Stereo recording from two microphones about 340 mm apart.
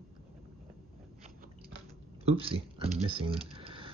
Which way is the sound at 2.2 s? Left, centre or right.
Centre.